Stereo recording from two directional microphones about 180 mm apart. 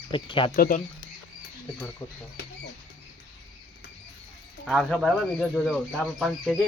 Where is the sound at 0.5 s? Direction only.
55° left (ahead or behind).